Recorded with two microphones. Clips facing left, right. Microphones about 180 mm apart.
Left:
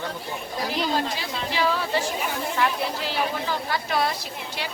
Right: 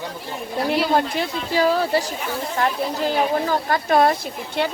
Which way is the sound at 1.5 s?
40° right (ahead or behind).